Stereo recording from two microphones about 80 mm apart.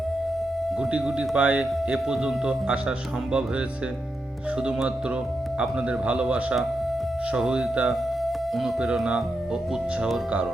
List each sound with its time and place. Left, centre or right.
0.8 s speech: centre
5.5 s speech: centre